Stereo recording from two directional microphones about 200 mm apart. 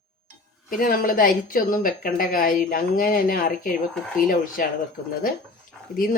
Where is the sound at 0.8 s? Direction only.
45° left (ahead or behind).